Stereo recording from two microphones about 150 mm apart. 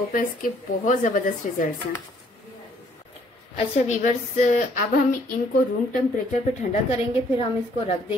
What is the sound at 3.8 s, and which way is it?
A woman's voice, 55° left (ahead or behind).